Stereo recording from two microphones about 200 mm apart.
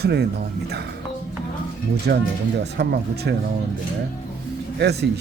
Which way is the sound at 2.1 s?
55° right (ahead or behind).